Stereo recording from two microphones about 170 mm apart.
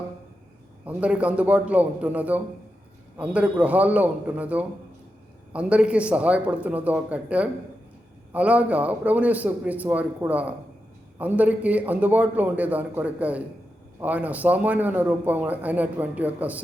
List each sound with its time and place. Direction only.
0.9 s a man's voice: 10° right (ahead or behind)